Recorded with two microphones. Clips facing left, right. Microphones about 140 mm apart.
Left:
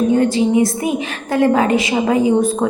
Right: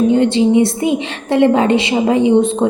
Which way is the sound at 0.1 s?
25° right (ahead or behind).